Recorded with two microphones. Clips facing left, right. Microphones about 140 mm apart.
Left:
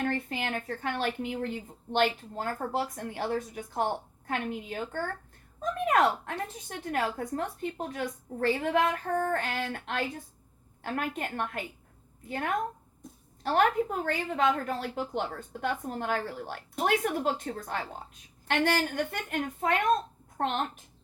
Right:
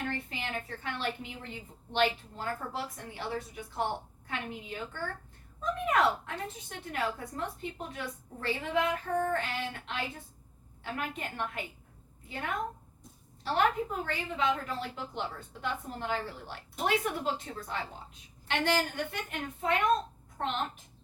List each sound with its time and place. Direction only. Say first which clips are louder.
0.0 s speech: left 6 dB; 55° left (ahead or behind)
13.4 s speech: left 3 dB; 50° left (ahead or behind)